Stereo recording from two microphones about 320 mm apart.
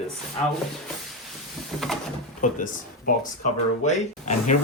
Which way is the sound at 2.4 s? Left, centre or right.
Left.